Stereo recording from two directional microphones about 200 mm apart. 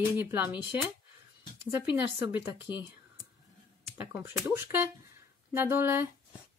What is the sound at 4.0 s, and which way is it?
A woman's voice, 10° right (ahead or behind).